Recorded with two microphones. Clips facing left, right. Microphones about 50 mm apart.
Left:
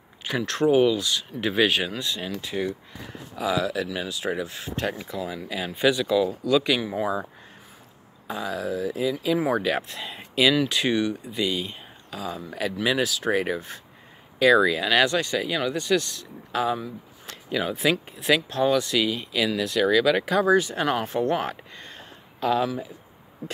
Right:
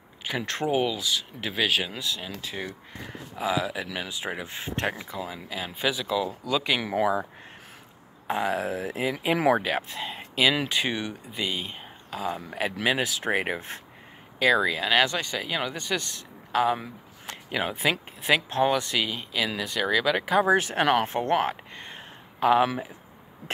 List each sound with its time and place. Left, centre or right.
0.4 s speech: centre
0.7 s speech: centre
3.3 s speech: centre
5.0 s speech: centre
8.3 s speech: right
9.6 s speech: centre; by 13.6 s right
14.4 s speech: centre
16.7 s a sound: right
17.5 s speech: centre
20.5 s speech: right
21.7 s a sound: right
22.6 s speech: right